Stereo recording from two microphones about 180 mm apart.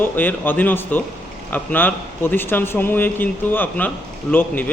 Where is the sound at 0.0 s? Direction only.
10° left (ahead or behind).